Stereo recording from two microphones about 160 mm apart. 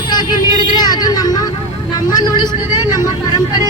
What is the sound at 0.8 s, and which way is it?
Vehicle, 25° left (ahead or behind).